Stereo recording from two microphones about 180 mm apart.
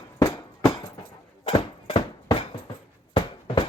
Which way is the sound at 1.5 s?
30° left (ahead or behind).